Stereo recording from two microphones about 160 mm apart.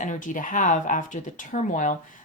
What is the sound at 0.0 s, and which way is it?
Speech, 55° left (ahead or behind).